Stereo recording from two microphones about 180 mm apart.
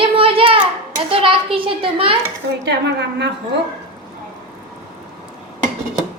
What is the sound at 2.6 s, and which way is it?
Speech, 70° right (ahead or behind).